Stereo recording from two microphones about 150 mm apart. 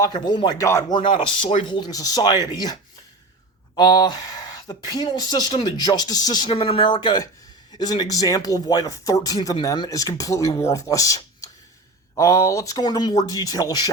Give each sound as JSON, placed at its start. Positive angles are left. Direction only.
{"t": 0.0, "sound": "speech", "side_deg": 30}
{"t": 0.9, "sound": "speech", "side_deg": 35}
{"t": 3.8, "sound": "speech", "side_deg": 30}